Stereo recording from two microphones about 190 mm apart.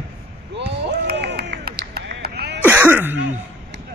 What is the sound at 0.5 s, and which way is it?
Run, 65° right (ahead or behind).